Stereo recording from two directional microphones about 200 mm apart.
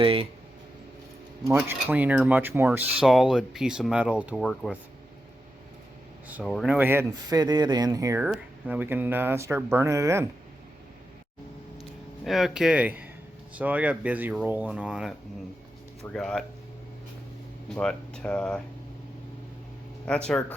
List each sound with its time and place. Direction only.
0.0 s speech: 25° right (ahead or behind)
1.5 s speech: 10° right (ahead or behind)
6.2 s speech: 5° right (ahead or behind)
12.2 s speech: centre (ahead or behind)
17.7 s speech: 5° left (ahead or behind)
20.1 s speech: 5° left (ahead or behind)